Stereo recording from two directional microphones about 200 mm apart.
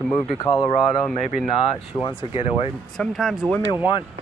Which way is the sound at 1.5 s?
25° left (ahead or behind).